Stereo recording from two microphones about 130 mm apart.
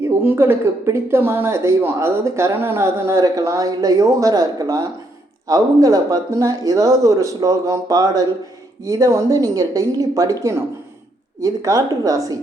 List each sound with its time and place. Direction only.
0.3 s speech: 20° right (ahead or behind)